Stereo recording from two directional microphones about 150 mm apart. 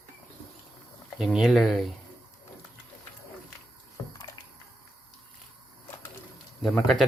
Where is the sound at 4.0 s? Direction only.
20° left (ahead or behind).